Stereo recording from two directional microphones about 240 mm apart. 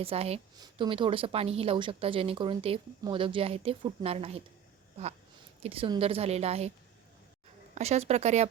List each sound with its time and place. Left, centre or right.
0.0 s a woman's voice: right
5.6 s a woman's voice: right
7.8 s a woman's voice: right